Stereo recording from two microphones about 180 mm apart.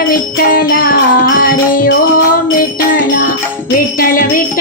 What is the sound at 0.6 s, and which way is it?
Music, 55° left (ahead or behind).